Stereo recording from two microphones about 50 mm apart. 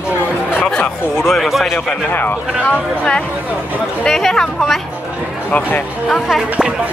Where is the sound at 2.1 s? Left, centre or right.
Left.